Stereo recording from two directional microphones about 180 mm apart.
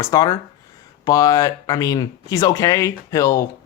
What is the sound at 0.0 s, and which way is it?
Speech, 20° left (ahead or behind).